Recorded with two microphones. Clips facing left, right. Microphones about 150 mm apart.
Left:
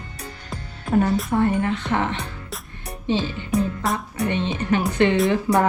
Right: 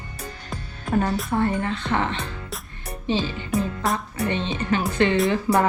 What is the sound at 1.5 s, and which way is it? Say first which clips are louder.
Speech: left 3 dB; 10° left (ahead or behind).